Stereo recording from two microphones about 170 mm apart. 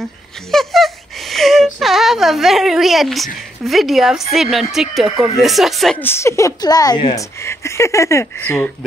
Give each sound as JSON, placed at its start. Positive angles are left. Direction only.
{"t": 0.5, "sound": "a sound", "side_deg": 0}
{"t": 3.6, "sound": "speech", "side_deg": 0}
{"t": 5.9, "sound": "a woman's voice", "side_deg": 15}